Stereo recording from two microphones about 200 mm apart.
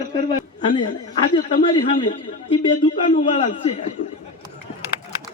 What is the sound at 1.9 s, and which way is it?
Speech, 40° left (ahead or behind).